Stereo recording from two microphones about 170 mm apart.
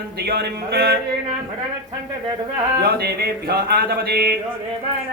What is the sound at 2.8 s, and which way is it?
Speech, 65° right (ahead or behind).